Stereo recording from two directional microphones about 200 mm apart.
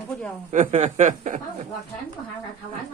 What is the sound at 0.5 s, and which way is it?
Speech, 35° right (ahead or behind).